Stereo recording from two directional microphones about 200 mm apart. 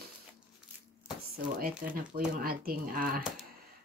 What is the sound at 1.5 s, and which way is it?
Speech, 45° right (ahead or behind).